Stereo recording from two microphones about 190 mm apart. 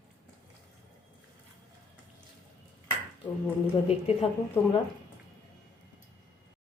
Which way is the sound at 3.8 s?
30° left (ahead or behind).